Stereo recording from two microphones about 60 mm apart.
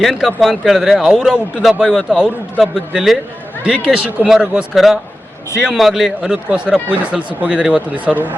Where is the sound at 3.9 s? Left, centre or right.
Right.